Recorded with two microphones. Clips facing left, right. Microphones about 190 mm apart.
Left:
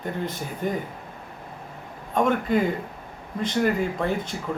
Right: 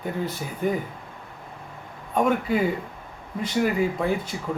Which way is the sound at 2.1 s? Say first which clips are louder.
Even; 5° right (ahead or behind).